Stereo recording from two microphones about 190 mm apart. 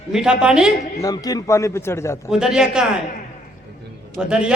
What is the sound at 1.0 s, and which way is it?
A man's voice, 20° left (ahead or behind).